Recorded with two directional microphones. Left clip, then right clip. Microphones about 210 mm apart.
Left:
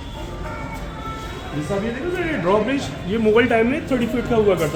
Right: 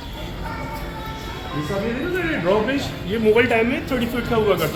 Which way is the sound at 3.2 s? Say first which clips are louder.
Even; 45° left (ahead or behind).